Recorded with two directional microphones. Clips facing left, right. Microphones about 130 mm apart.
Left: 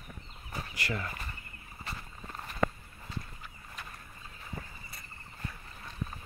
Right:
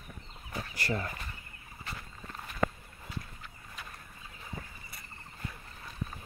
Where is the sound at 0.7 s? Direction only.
35° right (ahead or behind).